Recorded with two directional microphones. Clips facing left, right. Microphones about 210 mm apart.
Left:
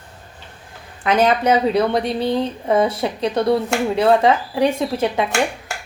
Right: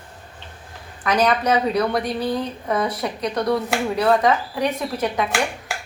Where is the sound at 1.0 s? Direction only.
25° left (ahead or behind).